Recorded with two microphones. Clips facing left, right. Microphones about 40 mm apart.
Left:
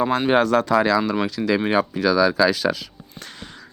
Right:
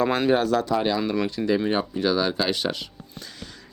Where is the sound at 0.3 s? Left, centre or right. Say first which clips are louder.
Left 3 dB; left.